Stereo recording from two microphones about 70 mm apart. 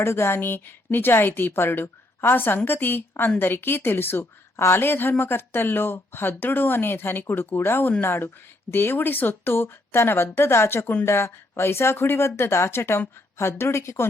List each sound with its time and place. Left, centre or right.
0.0 s a woman's voice: left